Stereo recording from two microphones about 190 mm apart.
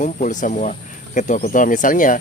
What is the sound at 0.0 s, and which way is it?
Speech, 40° left (ahead or behind).